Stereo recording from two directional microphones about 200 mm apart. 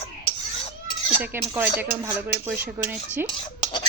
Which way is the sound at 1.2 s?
10° right (ahead or behind).